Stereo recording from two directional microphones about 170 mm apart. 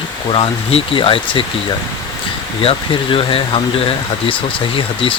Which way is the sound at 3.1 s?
35° left (ahead or behind).